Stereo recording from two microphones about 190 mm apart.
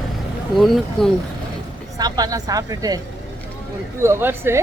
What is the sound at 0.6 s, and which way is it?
Speech, centre (ahead or behind).